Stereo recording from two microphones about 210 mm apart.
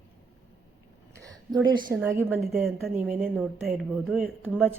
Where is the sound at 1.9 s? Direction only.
10° right (ahead or behind).